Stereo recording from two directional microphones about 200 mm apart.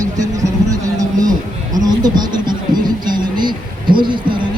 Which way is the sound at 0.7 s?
20° right (ahead or behind).